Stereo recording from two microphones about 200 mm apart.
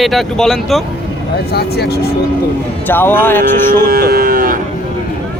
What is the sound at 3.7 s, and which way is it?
Cattle, 50° right (ahead or behind).